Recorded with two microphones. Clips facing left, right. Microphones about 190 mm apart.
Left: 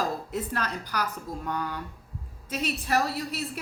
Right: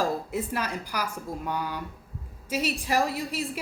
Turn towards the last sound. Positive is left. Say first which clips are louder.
# right 2 dB
turn(degrees=-10)  # may be behind; listen again after turning